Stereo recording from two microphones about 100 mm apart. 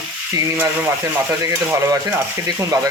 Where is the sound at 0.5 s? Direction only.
15° right (ahead or behind).